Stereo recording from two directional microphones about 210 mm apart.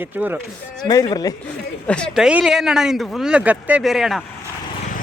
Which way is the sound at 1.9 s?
5° left (ahead or behind).